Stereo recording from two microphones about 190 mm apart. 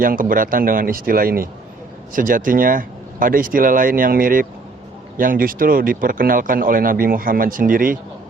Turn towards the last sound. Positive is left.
turn(degrees=-45)  # may be behind; listen again after turning